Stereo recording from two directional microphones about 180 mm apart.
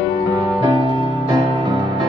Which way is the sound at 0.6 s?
25° right (ahead or behind).